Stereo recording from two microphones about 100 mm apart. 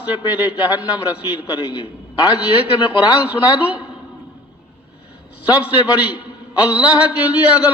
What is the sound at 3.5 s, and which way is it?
Speech, 15° right (ahead or behind).